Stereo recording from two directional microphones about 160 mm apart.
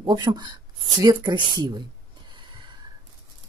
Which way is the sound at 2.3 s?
30° right (ahead or behind).